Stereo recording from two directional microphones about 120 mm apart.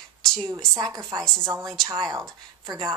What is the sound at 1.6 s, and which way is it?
Speech, 5° left (ahead or behind).